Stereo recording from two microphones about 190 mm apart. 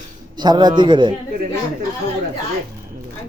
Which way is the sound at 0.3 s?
20° right (ahead or behind).